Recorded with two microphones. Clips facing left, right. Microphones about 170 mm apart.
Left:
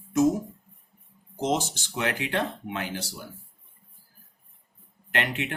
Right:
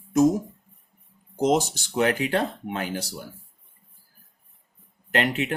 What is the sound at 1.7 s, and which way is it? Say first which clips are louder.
Speech: right 7 dB; 40° right (ahead or behind).